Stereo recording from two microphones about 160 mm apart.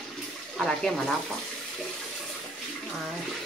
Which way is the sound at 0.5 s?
5° left (ahead or behind).